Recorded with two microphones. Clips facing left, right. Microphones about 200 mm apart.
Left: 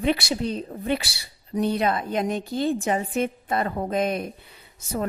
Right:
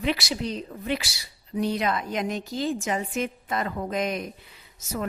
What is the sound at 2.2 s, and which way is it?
Speech, 55° left (ahead or behind).